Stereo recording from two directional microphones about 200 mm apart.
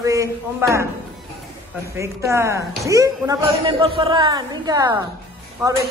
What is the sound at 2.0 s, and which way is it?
A man's voice, 15° right (ahead or behind).